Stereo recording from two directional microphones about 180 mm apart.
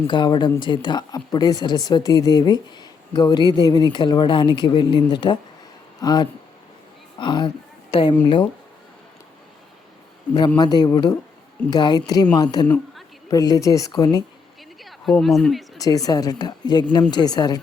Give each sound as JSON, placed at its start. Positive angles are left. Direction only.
{"t": 0.1, "sound": "a woman's voice", "side_deg": 25}
{"t": 10.6, "sound": "speech", "side_deg": 20}
{"t": 12.6, "sound": "a woman's voice", "side_deg": 10}
{"t": 13.3, "sound": "speech", "side_deg": 20}
{"t": 14.8, "sound": "a sound", "side_deg": 0}
{"t": 15.8, "sound": "speech", "side_deg": 20}